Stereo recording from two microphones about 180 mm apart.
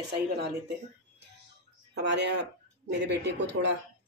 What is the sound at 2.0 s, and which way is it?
Speech, 75° right (ahead or behind).